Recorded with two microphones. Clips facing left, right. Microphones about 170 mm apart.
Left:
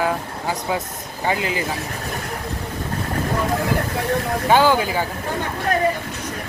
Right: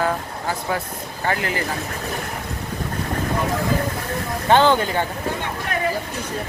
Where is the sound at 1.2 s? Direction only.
15° left (ahead or behind).